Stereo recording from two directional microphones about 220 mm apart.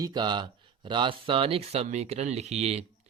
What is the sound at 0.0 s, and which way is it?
A man's voice, 20° right (ahead or behind).